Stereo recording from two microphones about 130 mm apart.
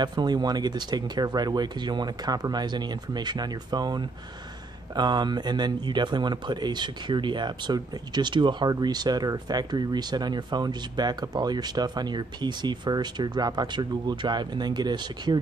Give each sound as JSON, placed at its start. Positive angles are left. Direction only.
{"t": 0.0, "sound": "speech", "side_deg": -35}